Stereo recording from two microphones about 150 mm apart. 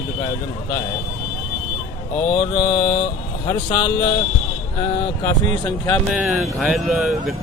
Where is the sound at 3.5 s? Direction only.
25° left (ahead or behind).